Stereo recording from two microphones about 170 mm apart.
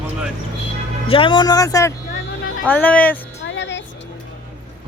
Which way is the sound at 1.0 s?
30° left (ahead or behind).